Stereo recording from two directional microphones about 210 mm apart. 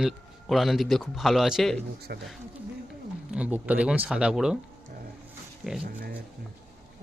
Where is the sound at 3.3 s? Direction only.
5° right (ahead or behind).